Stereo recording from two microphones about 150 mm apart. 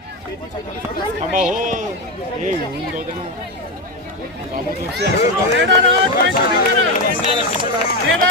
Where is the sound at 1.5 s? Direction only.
60° right (ahead or behind).